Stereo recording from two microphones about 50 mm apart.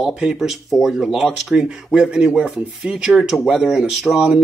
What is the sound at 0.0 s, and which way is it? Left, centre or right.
Speech, centre.